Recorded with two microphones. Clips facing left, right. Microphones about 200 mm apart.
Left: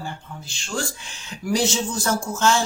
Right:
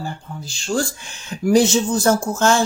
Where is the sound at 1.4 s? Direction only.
50° right (ahead or behind).